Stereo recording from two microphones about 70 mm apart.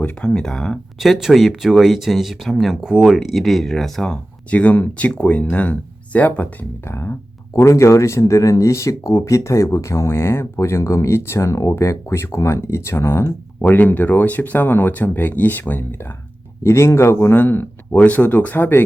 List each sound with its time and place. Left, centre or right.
0.0 s speech: centre
0.9 s speech: centre
4.5 s speech: left
6.8 s speech: left
13.6 s speech: left
16.6 s speech: left
17.2 s speech: left